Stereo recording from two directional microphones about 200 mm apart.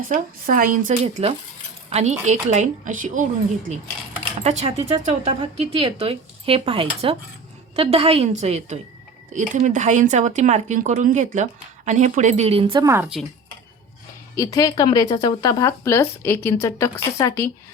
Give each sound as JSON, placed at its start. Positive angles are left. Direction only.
{"t": 0.1, "sound": "speech", "side_deg": -45}
{"t": 4.4, "sound": "speech", "side_deg": -30}
{"t": 12.8, "sound": "speech", "side_deg": -15}
{"t": 14.3, "sound": "a woman's voice", "side_deg": 15}